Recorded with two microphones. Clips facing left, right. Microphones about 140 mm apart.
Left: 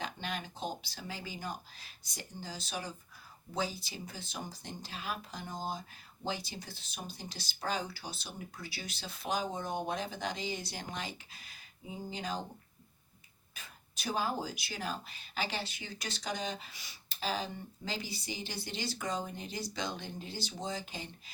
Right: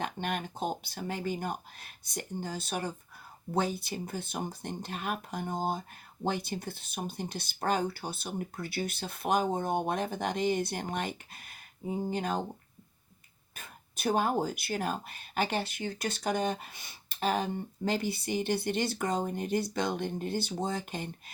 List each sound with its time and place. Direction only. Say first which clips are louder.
0.0 s speech: right 6 dB; 55° right (ahead or behind)
13.6 s speech: right 10 dB; 55° right (ahead or behind)